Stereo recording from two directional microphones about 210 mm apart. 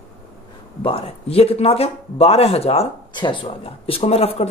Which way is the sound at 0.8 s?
25° left (ahead or behind).